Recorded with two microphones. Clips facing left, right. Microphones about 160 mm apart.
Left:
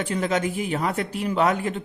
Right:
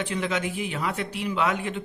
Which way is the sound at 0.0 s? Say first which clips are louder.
Left 4 dB; 40° left (ahead or behind).